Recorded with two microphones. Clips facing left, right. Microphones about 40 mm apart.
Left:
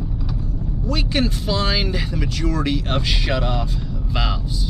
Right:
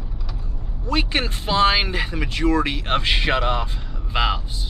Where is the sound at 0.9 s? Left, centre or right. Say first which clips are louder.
Even; right.